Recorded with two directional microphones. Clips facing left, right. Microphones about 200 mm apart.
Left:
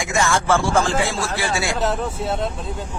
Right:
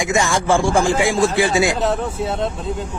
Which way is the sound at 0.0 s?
15° right (ahead or behind).